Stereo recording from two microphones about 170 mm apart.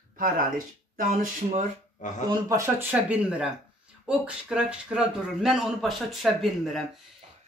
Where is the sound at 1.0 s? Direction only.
50° right (ahead or behind).